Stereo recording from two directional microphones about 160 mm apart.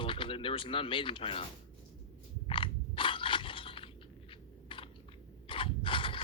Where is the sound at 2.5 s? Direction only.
30° left (ahead or behind).